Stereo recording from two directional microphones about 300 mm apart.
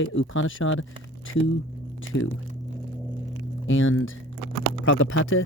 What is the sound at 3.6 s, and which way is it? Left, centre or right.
Speech, left.